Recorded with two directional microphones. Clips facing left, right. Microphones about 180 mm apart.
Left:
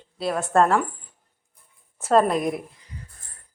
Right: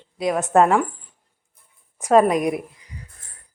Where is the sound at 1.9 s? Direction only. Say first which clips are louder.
Right 3 dB; 10° right (ahead or behind).